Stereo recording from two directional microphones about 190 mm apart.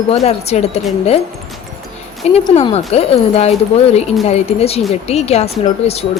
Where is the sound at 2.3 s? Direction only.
30° left (ahead or behind).